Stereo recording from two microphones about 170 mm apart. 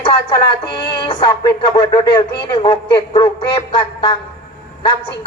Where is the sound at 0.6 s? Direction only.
80° left.